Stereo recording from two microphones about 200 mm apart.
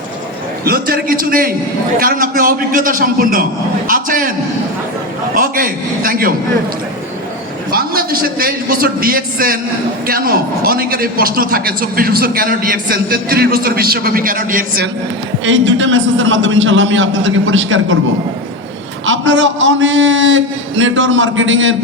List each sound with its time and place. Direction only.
0.6 s a man's voice: 50° right (ahead or behind)
5.3 s a man's voice: 45° right (ahead or behind)
7.7 s a man's voice: 50° right (ahead or behind)
15.4 s a man's voice: 70° right (ahead or behind)
19.0 s a man's voice: 65° right (ahead or behind)